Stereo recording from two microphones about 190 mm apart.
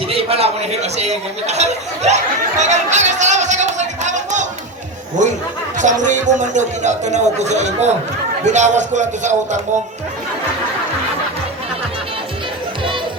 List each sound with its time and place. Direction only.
0.1 s speech: 30° right (ahead or behind)